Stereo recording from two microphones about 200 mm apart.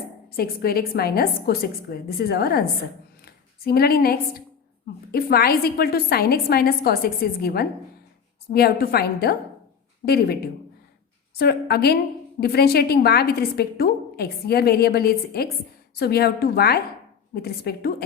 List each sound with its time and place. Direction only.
0.3 s a woman's voice: 50° left (ahead or behind)